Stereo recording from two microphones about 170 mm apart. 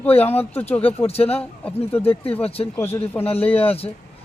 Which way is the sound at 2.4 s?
35° left (ahead or behind).